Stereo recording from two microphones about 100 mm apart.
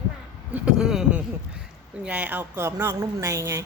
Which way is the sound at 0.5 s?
10° right (ahead or behind).